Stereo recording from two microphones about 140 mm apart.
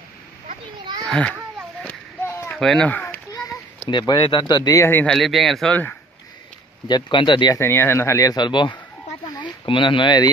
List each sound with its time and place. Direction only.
1.0 s a child's voice: 5° left (ahead or behind)
1.9 s a sound: 15° left (ahead or behind)
2.5 s speech: 5° left (ahead or behind)
3.8 s speech: 30° left (ahead or behind)
5.0 s speech: centre (ahead or behind)
6.9 s speech: 35° left (ahead or behind)
7.5 s speech: 15° left (ahead or behind)